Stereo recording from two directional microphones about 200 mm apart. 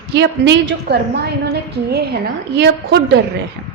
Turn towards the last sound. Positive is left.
turn(degrees=-55)  # may be behind; listen again after turning